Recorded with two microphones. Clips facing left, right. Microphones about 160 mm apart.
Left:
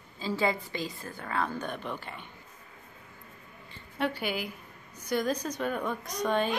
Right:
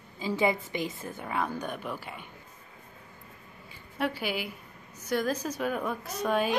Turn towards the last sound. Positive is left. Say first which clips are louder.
# even
turn(degrees=-5)  # may be behind; listen again after turning